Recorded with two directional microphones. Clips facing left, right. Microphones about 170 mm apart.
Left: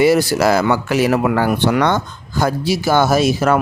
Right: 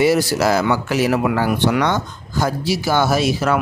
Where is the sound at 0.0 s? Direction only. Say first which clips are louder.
Left 3 dB; 60° left (ahead or behind).